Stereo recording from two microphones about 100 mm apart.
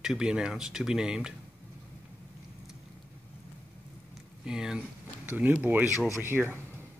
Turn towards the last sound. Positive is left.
turn(degrees=-20)  # may be behind; listen again after turning